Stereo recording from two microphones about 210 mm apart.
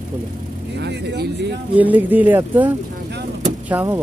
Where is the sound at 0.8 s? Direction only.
55° right (ahead or behind).